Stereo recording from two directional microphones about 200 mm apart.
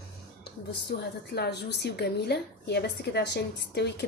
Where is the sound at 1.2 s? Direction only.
55° left (ahead or behind).